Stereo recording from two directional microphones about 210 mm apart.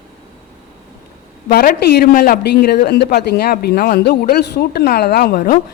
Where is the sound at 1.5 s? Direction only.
45° left (ahead or behind).